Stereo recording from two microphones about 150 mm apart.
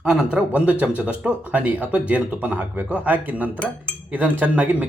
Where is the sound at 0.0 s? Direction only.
5° right (ahead or behind).